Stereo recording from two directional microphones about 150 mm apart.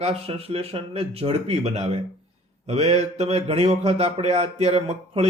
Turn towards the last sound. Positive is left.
turn(degrees=-45)  # may be behind; listen again after turning